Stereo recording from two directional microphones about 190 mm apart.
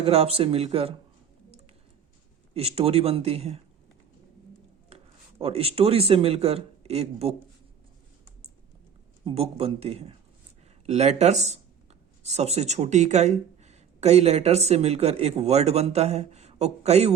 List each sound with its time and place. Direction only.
0.0 s speech: 30° right (ahead or behind)
2.5 s speech: 30° right (ahead or behind)
5.4 s speech: 30° right (ahead or behind)
9.2 s speech: 30° right (ahead or behind)